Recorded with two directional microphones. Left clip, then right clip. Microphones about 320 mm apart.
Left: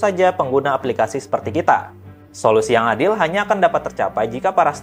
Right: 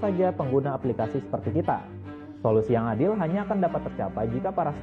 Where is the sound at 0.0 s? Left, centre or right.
Centre.